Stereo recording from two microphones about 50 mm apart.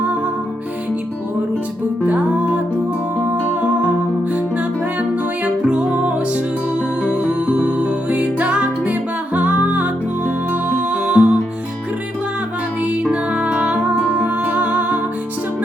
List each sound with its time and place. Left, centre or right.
2.0 s music: right
12.8 s music: right